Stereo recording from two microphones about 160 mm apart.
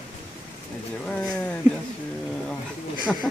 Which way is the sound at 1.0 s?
5° left (ahead or behind).